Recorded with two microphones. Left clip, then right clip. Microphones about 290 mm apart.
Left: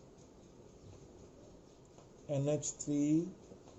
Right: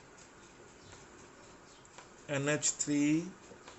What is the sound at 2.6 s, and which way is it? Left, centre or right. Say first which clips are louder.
Speech: right 4 dB; right.